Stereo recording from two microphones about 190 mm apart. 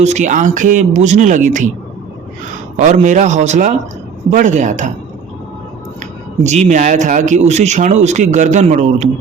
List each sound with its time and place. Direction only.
0.0 s a man's voice: 40° right (ahead or behind)
2.7 s a man's voice: 40° right (ahead or behind)
6.4 s a man's voice: 35° right (ahead or behind)